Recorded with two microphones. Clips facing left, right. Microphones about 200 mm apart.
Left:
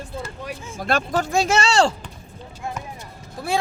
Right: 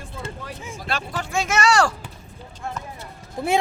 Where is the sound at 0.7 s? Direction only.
45° left (ahead or behind); by 1.9 s 25° left (ahead or behind).